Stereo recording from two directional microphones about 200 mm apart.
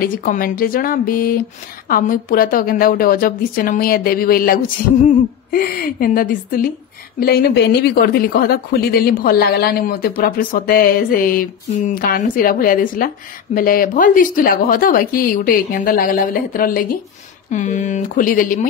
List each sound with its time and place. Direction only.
0.0 s a woman's voice: 45° left (ahead or behind)